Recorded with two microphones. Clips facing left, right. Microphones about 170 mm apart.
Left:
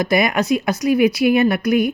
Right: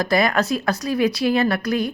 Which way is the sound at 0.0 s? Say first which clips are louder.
Left 2 dB; 20° left (ahead or behind).